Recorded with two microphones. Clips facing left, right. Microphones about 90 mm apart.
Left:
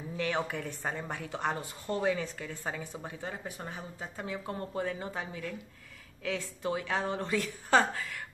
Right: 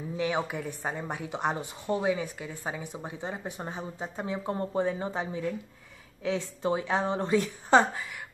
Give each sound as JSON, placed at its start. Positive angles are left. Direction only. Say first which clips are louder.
{"t": 0.2, "sound": "a woman's voice", "louder": "right 3 dB", "side_deg": -15}